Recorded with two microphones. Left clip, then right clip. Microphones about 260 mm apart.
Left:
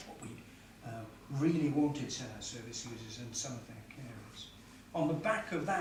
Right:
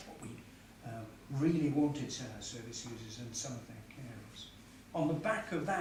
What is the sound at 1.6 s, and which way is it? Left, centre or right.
Speech, left.